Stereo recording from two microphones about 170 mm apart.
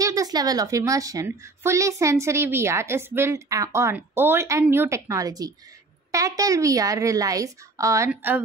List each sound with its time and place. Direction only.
0.0 s a woman's voice: 20° right (ahead or behind)